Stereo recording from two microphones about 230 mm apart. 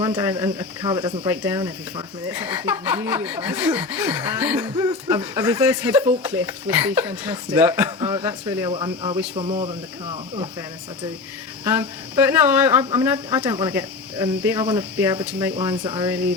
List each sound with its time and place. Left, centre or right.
0.0 s chuckle: centre
0.9 s speech: centre
1.3 s chuckle: centre
8.7 s speech: right
11.6 s chuckle: centre
12.8 s speech: centre
13.1 s chuckle: centre
15.7 s speech: right
16.0 s chuckle: centre